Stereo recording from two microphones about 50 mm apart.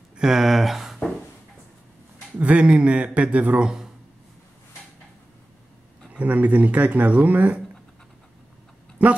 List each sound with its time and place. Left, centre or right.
0.2 s a sound: centre
2.3 s speech: right
6.0 s speech: right